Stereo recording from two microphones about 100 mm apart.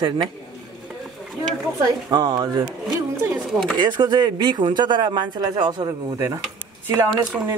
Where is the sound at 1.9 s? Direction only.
45° right (ahead or behind).